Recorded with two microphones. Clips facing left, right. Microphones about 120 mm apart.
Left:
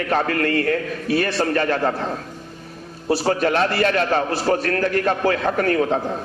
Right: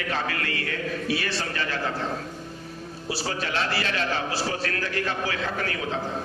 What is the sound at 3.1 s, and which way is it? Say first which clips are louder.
A man's voice: left 11 dB; 50° left (ahead or behind).